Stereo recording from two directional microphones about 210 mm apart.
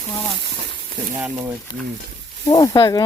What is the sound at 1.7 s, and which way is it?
Speech, 20° left (ahead or behind).